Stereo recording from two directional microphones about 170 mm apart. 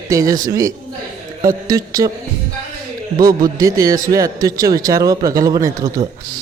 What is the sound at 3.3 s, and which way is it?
A man's voice, 20° right (ahead or behind).